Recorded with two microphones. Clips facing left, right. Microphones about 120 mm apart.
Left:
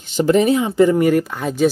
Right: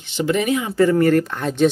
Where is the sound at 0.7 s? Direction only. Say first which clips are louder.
Right 2 dB; 20° left (ahead or behind); by 1.6 s centre (ahead or behind).